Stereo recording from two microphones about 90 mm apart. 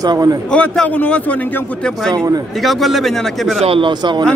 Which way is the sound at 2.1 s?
50° right (ahead or behind).